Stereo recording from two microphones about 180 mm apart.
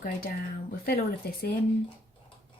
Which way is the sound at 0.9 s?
55° left (ahead or behind).